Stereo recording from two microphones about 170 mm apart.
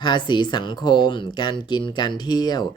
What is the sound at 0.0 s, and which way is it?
Speech, 25° left (ahead or behind).